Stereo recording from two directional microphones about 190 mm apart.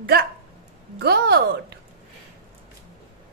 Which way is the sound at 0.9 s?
60° right (ahead or behind).